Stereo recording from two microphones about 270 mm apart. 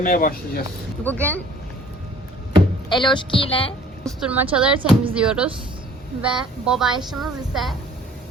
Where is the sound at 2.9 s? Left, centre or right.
Centre.